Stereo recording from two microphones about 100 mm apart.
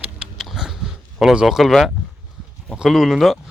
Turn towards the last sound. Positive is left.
turn(degrees=0)  # may be behind; listen again after turning